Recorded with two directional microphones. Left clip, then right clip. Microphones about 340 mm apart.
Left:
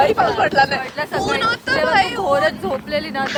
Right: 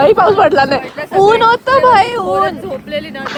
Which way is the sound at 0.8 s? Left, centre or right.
Centre.